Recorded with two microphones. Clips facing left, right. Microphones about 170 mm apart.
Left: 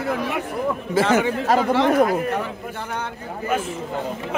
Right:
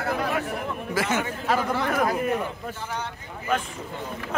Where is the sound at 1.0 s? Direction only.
30° left (ahead or behind).